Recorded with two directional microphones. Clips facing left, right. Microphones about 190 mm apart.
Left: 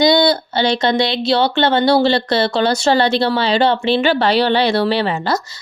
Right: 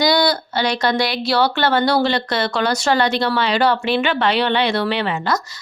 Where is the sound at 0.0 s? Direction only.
25° left (ahead or behind).